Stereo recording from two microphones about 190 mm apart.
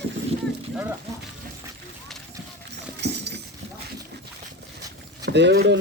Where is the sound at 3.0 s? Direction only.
65° right (ahead or behind).